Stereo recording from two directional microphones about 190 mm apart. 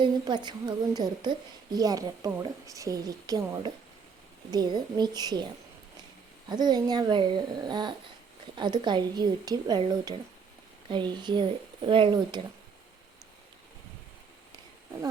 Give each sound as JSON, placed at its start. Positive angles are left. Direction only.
{"t": 0.0, "sound": "a woman's voice", "side_deg": -25}
{"t": 6.5, "sound": "a woman's voice", "side_deg": -20}